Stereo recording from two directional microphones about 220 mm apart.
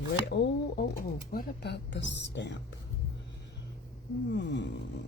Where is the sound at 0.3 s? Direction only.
50° left (ahead or behind).